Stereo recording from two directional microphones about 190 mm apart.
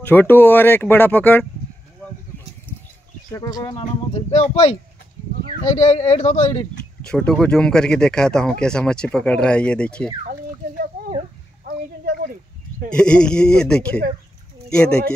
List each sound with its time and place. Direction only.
0.0 s speech: 10° left (ahead or behind)
3.3 s speech: 20° left (ahead or behind)
4.3 s speech: 35° left (ahead or behind)
7.1 s speech: 5° left (ahead or behind)
11.6 s a sound: 50° right (ahead or behind)
12.9 s speech: 5° left (ahead or behind)